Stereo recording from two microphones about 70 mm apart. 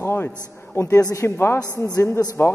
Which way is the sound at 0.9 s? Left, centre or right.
Left.